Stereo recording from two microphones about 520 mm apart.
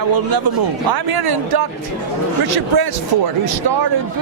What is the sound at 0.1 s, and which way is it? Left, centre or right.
Speech, right.